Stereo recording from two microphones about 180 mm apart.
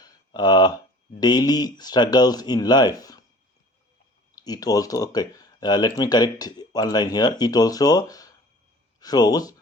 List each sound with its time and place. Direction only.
0.0 s a sound: 25° left (ahead or behind)
1.2 s speech: 20° left (ahead or behind)
4.4 s speech: 20° left (ahead or behind)